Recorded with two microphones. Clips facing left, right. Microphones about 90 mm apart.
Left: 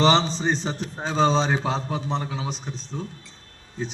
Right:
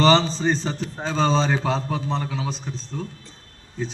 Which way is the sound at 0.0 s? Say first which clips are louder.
Right 2 dB; 20° left (ahead or behind).